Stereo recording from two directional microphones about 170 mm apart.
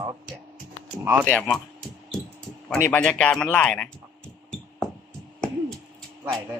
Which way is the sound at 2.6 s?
10° left (ahead or behind).